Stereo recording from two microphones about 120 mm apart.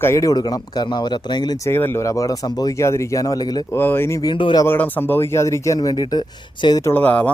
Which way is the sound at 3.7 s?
20° left (ahead or behind).